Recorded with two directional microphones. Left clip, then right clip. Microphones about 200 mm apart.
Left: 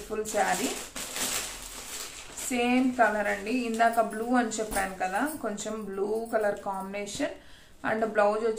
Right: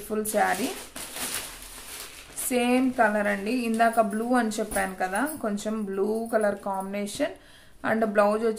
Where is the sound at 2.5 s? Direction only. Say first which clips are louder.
Right 3 dB; 45° right (ahead or behind).